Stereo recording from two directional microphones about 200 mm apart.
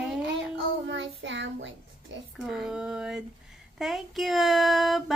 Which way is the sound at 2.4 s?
5° right (ahead or behind).